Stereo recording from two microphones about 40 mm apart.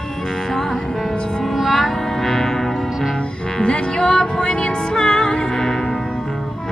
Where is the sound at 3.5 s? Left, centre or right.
Left.